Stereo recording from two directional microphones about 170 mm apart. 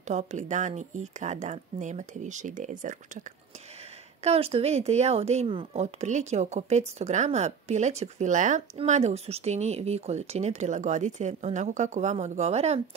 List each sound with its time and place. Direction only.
0.1 s speech: 45° right (ahead or behind)
4.2 s speech: 35° right (ahead or behind)